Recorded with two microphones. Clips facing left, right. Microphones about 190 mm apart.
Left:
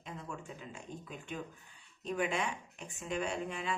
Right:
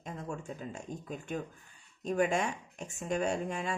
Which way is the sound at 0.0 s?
45° right (ahead or behind).